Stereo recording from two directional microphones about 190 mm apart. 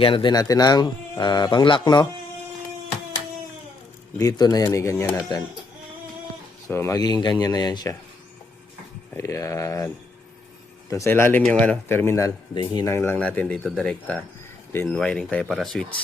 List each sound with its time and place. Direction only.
0.0 s speech: 25° left (ahead or behind)
4.2 s a man's voice: 20° left (ahead or behind)
6.7 s speech: 15° left (ahead or behind)
9.1 s a man's voice: 15° left (ahead or behind)